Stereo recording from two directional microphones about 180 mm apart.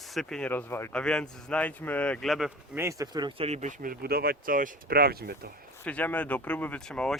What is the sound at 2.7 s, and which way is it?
Speech, 15° right (ahead or behind).